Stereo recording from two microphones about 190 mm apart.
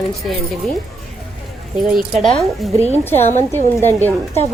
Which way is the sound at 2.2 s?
Centre (ahead or behind).